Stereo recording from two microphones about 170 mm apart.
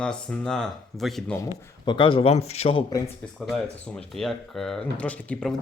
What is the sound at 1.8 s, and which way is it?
Speech, 30° left (ahead or behind).